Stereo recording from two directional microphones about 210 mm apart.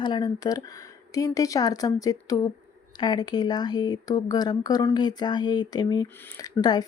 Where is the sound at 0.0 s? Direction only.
20° left (ahead or behind).